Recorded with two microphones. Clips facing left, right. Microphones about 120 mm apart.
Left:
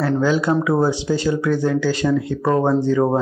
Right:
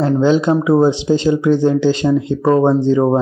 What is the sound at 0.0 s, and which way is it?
Speech, 20° right (ahead or behind).